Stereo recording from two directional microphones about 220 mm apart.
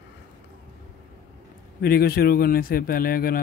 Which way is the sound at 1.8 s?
45° left (ahead or behind).